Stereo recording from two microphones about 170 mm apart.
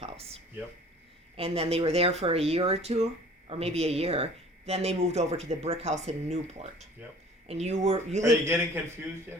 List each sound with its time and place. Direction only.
0.0 s a sound: 35° right (ahead or behind)
1.4 s speech: 35° right (ahead or behind)
8.2 s speech: 15° right (ahead or behind)